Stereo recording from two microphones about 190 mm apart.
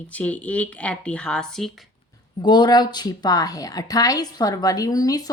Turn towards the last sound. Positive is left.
turn(degrees=20)  # may be behind; listen again after turning